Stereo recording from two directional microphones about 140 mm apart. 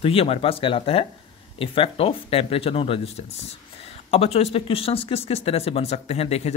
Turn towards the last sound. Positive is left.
turn(degrees=50)  # may be behind; listen again after turning